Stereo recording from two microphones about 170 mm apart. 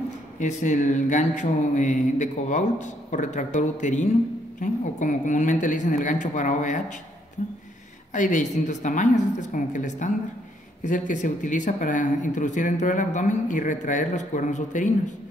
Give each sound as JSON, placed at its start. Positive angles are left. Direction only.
{"t": 0.4, "sound": "speech", "side_deg": 45}
{"t": 8.1, "sound": "speech", "side_deg": 50}